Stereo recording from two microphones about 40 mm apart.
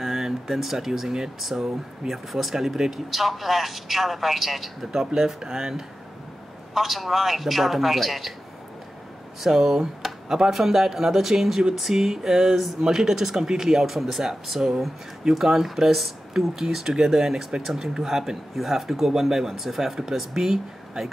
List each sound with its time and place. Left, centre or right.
0.0 s a sound: centre
1.4 s speech: centre
6.7 s speech: centre
9.4 s speech: centre
12.8 s speech: centre